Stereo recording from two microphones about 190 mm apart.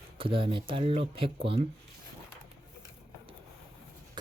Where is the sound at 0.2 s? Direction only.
25° right (ahead or behind).